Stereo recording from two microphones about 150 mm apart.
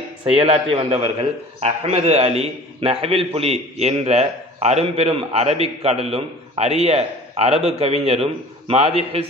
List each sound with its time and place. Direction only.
0.2 s a man's voice: 40° right (ahead or behind)